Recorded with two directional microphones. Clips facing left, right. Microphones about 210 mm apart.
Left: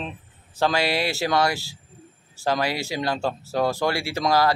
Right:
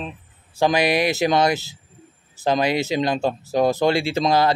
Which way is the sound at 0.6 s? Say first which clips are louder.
Right 4 dB; 15° right (ahead or behind).